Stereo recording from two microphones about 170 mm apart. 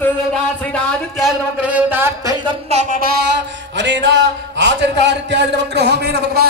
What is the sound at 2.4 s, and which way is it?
Speech, 40° right (ahead or behind).